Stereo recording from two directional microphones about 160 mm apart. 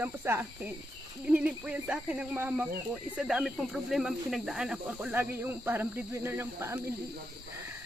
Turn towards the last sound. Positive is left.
turn(degrees=-15)  # may be behind; listen again after turning